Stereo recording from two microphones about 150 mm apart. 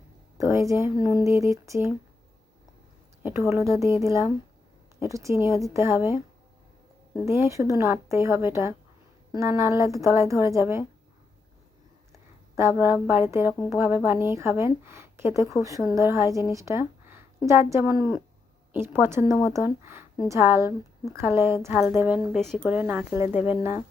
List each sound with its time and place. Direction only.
0.3 s a woman's voice: 20° right (ahead or behind)
3.2 s a woman's voice: 15° right (ahead or behind)
7.3 s a woman's voice: 20° right (ahead or behind)
12.1 s a woman's voice: 20° right (ahead or behind)
22.4 s a woman's voice: centre (ahead or behind)
22.6 s a woman's voice: 10° right (ahead or behind)